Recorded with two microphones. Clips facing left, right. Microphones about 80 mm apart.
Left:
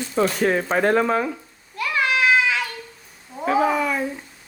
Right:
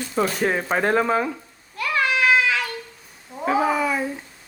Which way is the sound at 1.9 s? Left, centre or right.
Centre.